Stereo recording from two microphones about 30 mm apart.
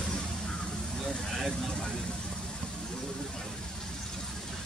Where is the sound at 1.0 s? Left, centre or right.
Centre.